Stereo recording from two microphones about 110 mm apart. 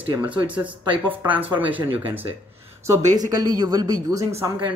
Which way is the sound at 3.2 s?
35° right (ahead or behind).